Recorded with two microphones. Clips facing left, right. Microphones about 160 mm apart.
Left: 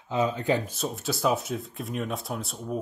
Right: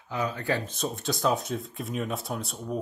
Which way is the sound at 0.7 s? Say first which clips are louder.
Even; 5° left (ahead or behind).